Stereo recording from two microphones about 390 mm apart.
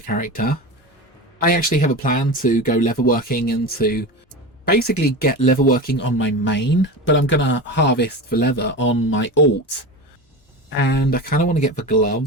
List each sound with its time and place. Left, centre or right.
0.0 s speech: left
10.7 s speech: left